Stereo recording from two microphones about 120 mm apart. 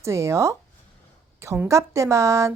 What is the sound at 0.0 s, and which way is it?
Speech, 25° right (ahead or behind).